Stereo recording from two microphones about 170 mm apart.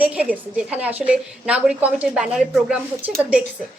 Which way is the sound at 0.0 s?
10° right (ahead or behind).